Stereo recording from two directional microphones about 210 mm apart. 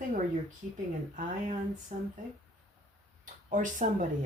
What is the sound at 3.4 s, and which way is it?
Speech, 35° right (ahead or behind).